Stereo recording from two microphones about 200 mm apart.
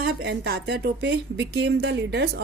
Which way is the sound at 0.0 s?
50° right (ahead or behind).